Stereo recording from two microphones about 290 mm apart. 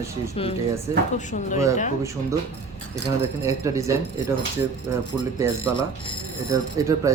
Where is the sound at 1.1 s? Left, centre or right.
Left.